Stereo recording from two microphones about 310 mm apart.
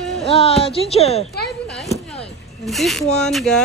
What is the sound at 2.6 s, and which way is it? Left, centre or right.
Speech, centre.